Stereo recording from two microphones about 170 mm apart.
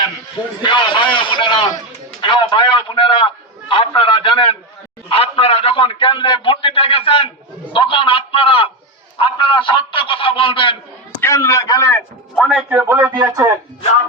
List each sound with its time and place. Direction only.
0.6 s a man's voice: 30° left (ahead or behind)
11.2 s a man's voice: 15° left (ahead or behind)
12.4 s a man's voice: 5° left (ahead or behind)
12.6 s speech: 15° right (ahead or behind)